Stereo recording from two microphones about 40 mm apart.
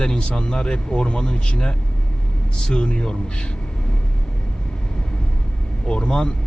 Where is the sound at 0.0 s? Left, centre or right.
Left.